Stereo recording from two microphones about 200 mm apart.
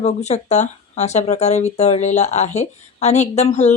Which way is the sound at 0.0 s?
35° left (ahead or behind).